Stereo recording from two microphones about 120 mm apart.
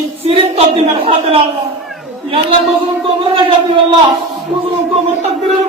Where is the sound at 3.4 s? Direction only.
45° right (ahead or behind).